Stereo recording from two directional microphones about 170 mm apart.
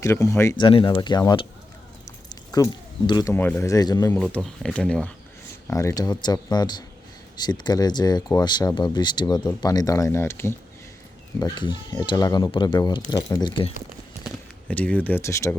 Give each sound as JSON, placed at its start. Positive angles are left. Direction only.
{"t": 0.0, "sound": "speech", "side_deg": 20}
{"t": 0.6, "sound": "speech", "side_deg": 30}
{"t": 2.3, "sound": "a sound", "side_deg": 20}
{"t": 3.1, "sound": "speech", "side_deg": 20}
{"t": 3.3, "sound": "speech", "side_deg": 10}
{"t": 4.1, "sound": "speech", "side_deg": 5}
{"t": 5.6, "sound": "speech", "side_deg": 15}
{"t": 14.3, "sound": "speech", "side_deg": 10}